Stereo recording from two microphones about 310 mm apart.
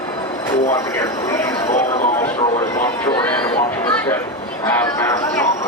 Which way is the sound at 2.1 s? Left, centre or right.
Centre.